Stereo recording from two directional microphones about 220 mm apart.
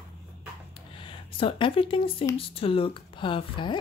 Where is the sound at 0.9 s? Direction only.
25° left (ahead or behind).